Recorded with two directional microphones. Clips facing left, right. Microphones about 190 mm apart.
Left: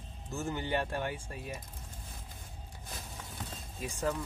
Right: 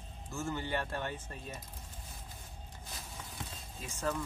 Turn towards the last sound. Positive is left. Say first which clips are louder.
# left 3 dB
turn(degrees=15)  # may be behind; listen again after turning